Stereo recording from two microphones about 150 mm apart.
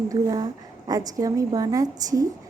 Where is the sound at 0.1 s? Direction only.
25° right (ahead or behind).